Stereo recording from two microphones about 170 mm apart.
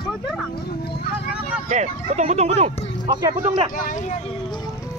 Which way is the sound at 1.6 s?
45° right (ahead or behind).